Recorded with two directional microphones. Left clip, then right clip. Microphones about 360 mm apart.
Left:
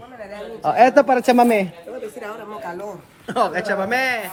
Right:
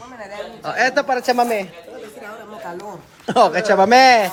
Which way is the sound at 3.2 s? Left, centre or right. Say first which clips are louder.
Right 6 dB; centre.